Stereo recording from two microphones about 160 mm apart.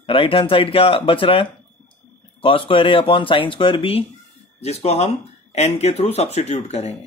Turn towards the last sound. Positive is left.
turn(degrees=40)  # may be behind; listen again after turning